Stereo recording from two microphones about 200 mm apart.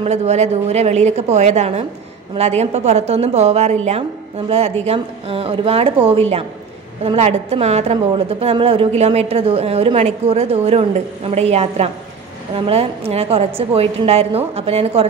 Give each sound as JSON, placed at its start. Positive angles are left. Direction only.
{"t": 0.0, "sound": "a woman's voice", "side_deg": -35}